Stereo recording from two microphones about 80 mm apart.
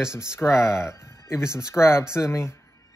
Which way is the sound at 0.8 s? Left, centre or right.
Left.